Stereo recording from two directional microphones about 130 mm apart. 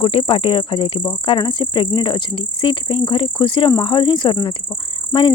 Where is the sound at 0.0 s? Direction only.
45° left (ahead or behind).